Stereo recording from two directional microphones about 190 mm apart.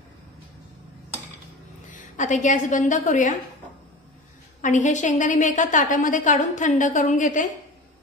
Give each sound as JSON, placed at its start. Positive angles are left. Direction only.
{"t": 1.9, "sound": "a woman's voice", "side_deg": 40}
{"t": 4.6, "sound": "a woman's voice", "side_deg": 40}